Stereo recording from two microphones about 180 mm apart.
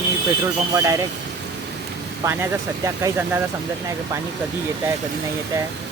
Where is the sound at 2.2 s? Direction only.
15° right (ahead or behind).